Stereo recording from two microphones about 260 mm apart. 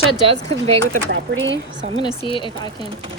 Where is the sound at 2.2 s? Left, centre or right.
Centre.